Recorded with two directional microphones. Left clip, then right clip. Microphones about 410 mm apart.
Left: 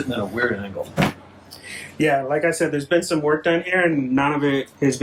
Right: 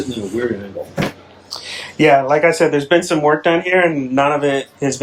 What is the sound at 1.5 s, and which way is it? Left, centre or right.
Speech, centre.